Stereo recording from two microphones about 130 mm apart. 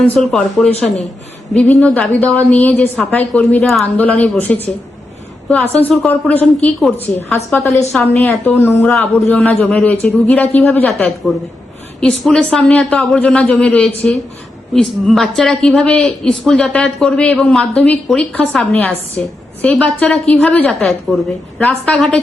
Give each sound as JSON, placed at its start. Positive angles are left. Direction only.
{"t": 0.0, "sound": "a man's voice", "side_deg": 5}
{"t": 7.3, "sound": "a woman's voice", "side_deg": 20}